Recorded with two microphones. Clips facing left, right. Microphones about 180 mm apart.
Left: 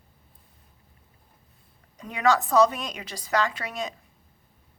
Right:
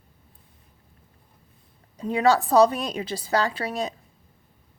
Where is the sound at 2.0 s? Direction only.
30° right (ahead or behind).